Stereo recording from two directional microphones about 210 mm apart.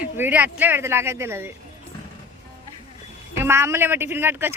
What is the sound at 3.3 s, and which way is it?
Speech, 10° right (ahead or behind).